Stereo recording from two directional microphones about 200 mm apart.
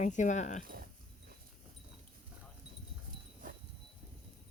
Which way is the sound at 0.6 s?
45° right (ahead or behind).